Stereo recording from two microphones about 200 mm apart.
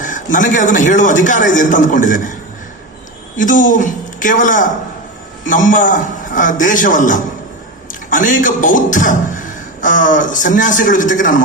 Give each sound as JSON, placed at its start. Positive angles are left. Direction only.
{"t": 0.0, "sound": "a man's voice", "side_deg": 40}
{"t": 3.3, "sound": "a man's voice", "side_deg": 40}